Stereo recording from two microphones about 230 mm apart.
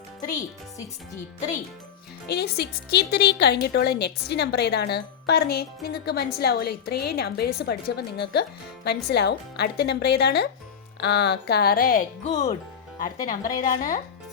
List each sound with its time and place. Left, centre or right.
2.2 s a woman's voice: left